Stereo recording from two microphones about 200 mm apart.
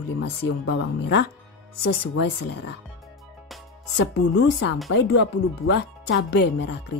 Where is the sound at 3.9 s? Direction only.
60° left (ahead or behind).